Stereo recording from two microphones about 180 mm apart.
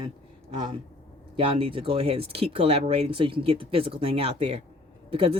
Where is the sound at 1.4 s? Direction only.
30° right (ahead or behind).